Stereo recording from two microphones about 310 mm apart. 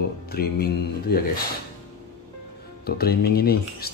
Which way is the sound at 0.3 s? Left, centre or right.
Left.